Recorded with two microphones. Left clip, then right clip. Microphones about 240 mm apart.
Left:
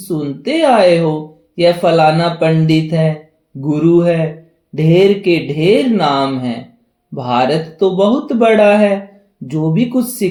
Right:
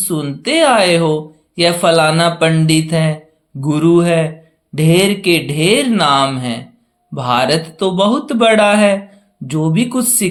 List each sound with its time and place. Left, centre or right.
0.4 s speech: right